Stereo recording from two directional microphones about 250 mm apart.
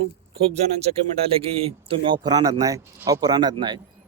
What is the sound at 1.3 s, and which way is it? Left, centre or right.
Speech, right.